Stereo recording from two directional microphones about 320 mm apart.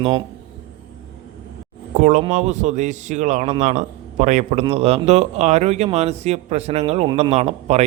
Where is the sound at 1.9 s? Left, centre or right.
Right.